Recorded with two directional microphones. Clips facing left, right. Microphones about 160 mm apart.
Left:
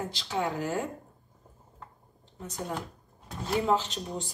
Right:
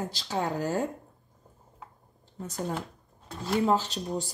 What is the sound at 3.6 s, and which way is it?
Speech, 40° right (ahead or behind).